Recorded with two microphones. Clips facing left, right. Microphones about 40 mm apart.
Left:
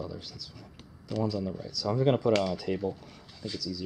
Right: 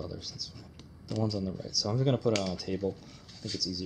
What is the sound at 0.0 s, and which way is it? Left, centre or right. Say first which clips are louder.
Speech: left 1 dB; centre.